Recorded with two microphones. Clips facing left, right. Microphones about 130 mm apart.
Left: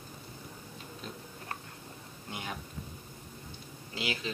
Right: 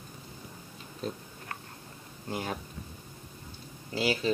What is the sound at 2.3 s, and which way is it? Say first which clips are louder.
Speech: right 6 dB; 35° right (ahead or behind).